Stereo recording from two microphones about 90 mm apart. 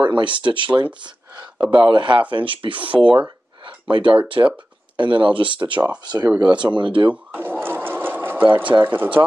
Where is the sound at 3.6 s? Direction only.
65° right (ahead or behind).